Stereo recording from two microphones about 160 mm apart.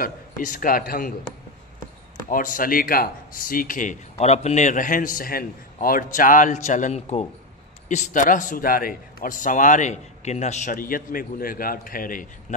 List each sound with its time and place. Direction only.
0.0 s speech: 55° left (ahead or behind)
2.2 s speech: 55° left (ahead or behind)